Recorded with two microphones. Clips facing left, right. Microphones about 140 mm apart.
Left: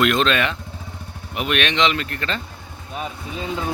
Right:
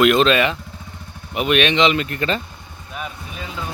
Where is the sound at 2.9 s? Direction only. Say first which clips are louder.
Left 2 dB; 30° left (ahead or behind).